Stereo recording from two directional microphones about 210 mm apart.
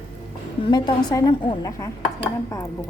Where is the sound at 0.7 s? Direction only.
20° left (ahead or behind).